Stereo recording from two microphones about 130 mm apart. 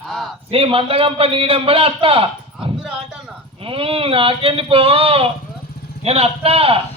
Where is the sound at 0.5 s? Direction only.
45° right (ahead or behind).